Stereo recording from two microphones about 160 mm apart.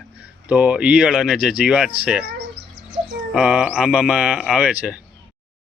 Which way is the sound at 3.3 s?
5° right (ahead or behind).